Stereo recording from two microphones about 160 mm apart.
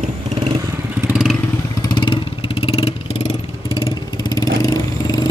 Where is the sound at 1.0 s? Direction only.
5° right (ahead or behind).